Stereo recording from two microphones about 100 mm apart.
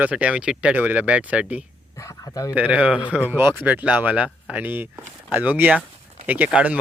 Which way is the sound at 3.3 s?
25° right (ahead or behind).